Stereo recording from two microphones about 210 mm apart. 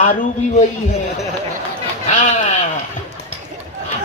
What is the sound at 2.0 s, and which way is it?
Sheep, 35° left (ahead or behind).